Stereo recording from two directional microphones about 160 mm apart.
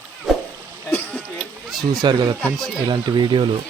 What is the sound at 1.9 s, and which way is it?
Speech, 25° right (ahead or behind).